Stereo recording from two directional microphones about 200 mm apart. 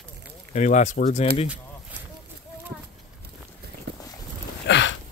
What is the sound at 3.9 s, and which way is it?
Boat, 55° right (ahead or behind).